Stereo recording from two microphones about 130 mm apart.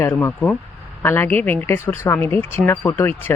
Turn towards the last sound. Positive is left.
turn(degrees=15)  # may be behind; listen again after turning